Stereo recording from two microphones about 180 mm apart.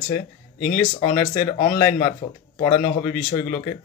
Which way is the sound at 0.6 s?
50° left (ahead or behind).